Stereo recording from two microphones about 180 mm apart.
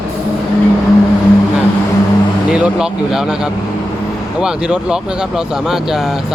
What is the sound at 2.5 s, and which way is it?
Speech, 5° right (ahead or behind).